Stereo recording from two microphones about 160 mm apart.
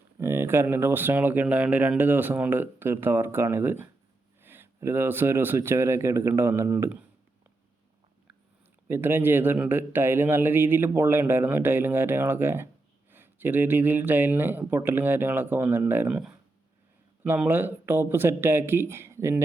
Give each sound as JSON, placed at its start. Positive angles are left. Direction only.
{"t": 0.2, "sound": "a man's voice", "side_deg": -15}
{"t": 8.9, "sound": "a man's voice", "side_deg": -15}